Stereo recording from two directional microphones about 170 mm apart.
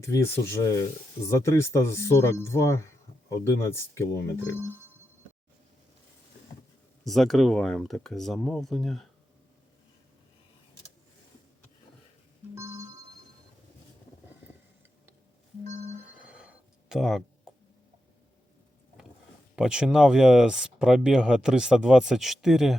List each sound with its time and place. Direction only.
0.0 s speech: 15° left (ahead or behind)
7.0 s speech: centre (ahead or behind)
12.5 s music: 15° right (ahead or behind)
15.6 s a sound: 40° right (ahead or behind)
16.2 s a sound: 5° right (ahead or behind)
17.5 s tick: centre (ahead or behind)
19.5 s speech: 5° right (ahead or behind)